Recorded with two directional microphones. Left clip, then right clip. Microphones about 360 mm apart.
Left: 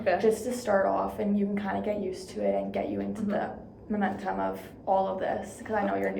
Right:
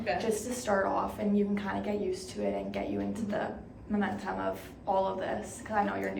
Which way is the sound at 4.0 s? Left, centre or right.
Centre.